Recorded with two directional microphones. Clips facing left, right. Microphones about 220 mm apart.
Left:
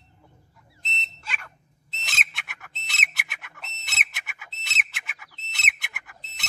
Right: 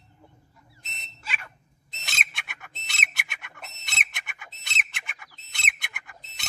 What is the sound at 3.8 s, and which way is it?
Bird, 5° left (ahead or behind).